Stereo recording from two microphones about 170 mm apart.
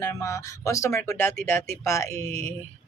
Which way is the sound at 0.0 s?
15° left (ahead or behind).